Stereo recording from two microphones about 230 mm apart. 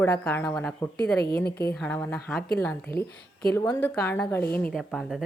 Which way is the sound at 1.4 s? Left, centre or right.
Left.